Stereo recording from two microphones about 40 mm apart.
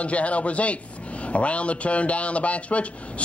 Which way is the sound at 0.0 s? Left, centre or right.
Left.